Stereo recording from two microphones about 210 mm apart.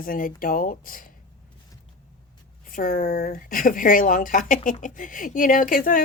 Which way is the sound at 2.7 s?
40° left (ahead or behind).